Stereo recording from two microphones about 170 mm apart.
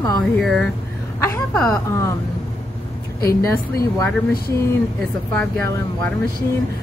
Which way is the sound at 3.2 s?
15° left (ahead or behind).